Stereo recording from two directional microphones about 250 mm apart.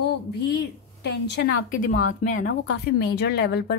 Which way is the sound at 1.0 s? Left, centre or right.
Left.